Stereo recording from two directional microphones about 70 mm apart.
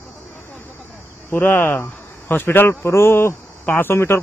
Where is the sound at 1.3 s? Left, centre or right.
Left.